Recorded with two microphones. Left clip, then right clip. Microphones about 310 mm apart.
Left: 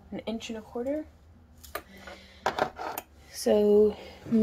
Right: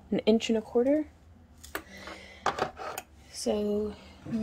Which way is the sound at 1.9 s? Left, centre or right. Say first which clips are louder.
Right 3 dB; centre.